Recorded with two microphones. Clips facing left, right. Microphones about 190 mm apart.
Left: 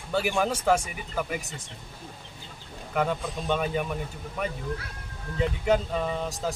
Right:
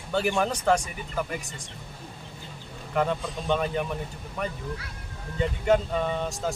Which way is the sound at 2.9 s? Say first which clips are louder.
Right 1 dB; 5° left (ahead or behind).